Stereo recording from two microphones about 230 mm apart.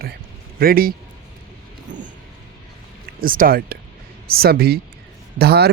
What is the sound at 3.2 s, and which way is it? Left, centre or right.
Speech, right.